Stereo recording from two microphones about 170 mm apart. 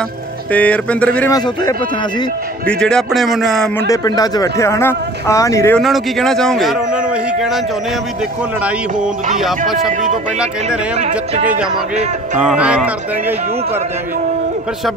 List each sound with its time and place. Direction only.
0.5 s speech: 10° left (ahead or behind)
1.3 s speech: 20° left (ahead or behind)
2.6 s a man's voice: 5° left (ahead or behind)
3.8 s speech: 20° left (ahead or behind)
5.8 s a man's voice: centre (ahead or behind)
12.4 s speech: 5° right (ahead or behind)